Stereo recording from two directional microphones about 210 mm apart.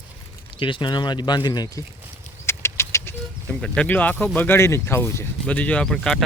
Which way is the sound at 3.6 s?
5° left (ahead or behind).